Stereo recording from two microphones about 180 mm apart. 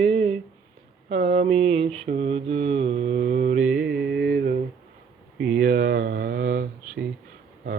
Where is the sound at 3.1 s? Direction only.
50° right (ahead or behind).